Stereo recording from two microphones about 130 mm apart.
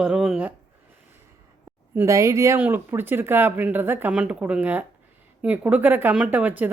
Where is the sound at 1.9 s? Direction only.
20° right (ahead or behind).